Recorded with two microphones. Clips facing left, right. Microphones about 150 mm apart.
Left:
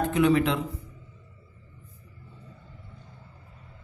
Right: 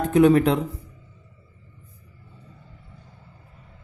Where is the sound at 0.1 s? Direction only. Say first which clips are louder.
Right 8 dB; 45° right (ahead or behind).